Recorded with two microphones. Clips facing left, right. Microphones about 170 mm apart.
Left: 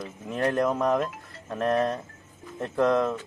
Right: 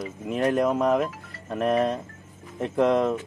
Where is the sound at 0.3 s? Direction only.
15° right (ahead or behind).